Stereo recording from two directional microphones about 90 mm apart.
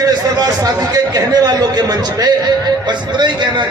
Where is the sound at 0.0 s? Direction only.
45° right (ahead or behind).